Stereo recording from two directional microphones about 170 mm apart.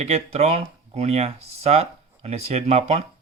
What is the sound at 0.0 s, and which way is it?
Speech, 40° right (ahead or behind).